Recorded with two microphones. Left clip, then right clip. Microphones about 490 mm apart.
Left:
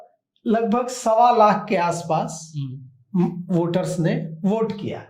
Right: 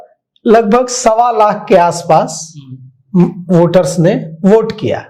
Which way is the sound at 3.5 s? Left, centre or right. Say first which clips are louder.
Right 15 dB; right.